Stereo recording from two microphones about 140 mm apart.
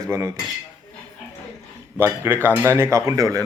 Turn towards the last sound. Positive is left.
turn(degrees=-25)  # may be behind; listen again after turning